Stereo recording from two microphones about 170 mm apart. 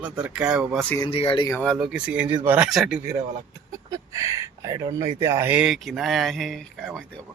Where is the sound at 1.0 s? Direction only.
35° left (ahead or behind).